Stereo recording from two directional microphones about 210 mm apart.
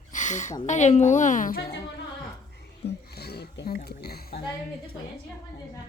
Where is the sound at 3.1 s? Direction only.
50° left (ahead or behind).